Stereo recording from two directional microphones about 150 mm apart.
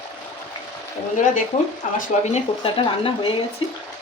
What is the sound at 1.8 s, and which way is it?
Speech, 55° left (ahead or behind).